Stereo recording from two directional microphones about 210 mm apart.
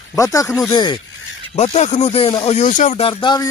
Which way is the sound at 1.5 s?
30° left (ahead or behind).